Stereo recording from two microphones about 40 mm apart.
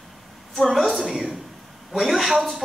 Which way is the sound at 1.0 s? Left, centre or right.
Centre.